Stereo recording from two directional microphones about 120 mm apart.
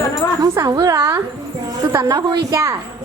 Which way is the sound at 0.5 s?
30° right (ahead or behind).